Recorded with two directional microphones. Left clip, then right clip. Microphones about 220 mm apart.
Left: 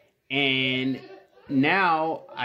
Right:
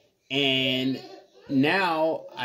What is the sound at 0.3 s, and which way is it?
Mantra, 10° left (ahead or behind).